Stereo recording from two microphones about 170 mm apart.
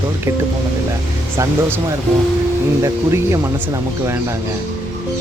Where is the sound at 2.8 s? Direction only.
15° right (ahead or behind).